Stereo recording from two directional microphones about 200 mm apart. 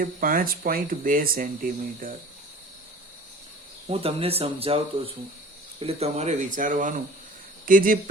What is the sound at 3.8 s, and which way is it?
Speech, 30° right (ahead or behind).